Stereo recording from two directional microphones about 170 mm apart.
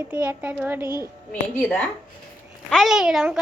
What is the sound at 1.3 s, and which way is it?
Speech, 10° left (ahead or behind).